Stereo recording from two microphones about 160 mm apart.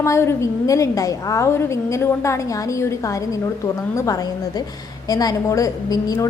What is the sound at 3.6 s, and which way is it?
A woman's voice, 20° left (ahead or behind).